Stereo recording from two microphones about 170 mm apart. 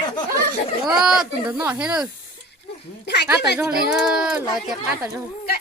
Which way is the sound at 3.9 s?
5° right (ahead or behind).